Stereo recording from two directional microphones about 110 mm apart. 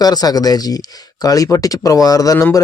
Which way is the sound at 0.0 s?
35° left (ahead or behind).